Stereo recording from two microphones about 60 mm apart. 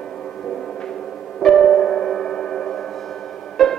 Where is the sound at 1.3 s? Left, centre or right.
Centre.